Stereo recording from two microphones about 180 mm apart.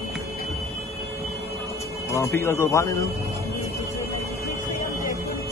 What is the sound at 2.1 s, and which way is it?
Speech, 15° left (ahead or behind).